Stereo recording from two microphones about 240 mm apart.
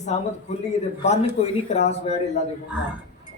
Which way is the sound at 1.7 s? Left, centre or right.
Left.